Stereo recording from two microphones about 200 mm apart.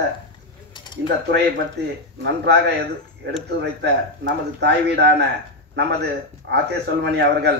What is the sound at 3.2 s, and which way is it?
Speech, 60° right (ahead or behind).